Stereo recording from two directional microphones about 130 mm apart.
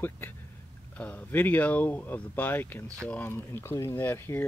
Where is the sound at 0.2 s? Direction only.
15° left (ahead or behind).